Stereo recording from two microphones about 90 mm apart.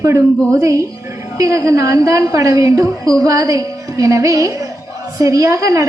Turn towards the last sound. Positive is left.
turn(degrees=-35)  # may be behind; listen again after turning